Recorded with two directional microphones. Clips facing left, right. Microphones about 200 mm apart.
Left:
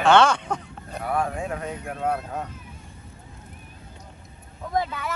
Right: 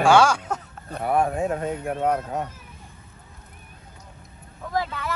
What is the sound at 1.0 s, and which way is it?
Speech, 25° right (ahead or behind).